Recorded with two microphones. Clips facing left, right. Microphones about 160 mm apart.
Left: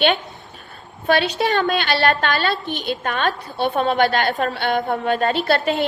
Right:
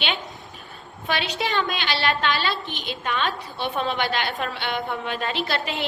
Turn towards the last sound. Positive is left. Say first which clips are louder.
# left 8 dB
turn(degrees=45)  # may be behind; listen again after turning